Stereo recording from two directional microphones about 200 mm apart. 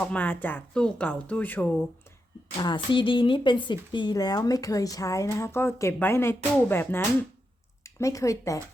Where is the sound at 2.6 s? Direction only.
25° left (ahead or behind).